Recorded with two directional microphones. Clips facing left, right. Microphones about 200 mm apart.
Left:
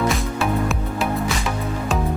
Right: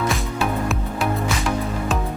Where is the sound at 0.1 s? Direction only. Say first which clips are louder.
Left 1 dB; centre (ahead or behind).